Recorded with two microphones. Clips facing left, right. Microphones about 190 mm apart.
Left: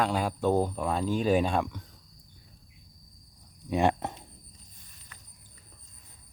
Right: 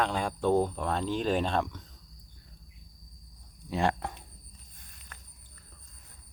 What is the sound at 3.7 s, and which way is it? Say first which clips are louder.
Speech: left 3 dB; 15° left (ahead or behind).